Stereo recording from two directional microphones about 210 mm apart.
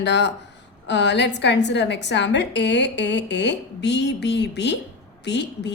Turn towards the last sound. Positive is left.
turn(degrees=55)  # may be behind; listen again after turning